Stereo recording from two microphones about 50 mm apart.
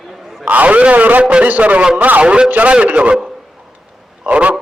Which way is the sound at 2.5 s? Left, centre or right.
Right.